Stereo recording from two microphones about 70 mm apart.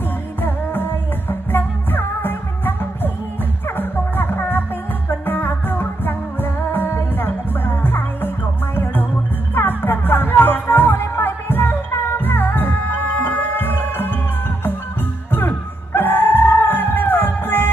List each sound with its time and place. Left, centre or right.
0.4 s music: left
9.5 s music: left
15.3 s music: left